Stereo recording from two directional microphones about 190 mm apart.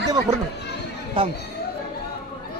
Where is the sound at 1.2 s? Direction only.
25° right (ahead or behind).